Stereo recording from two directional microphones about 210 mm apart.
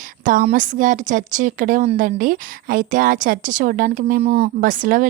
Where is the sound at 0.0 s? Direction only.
40° right (ahead or behind).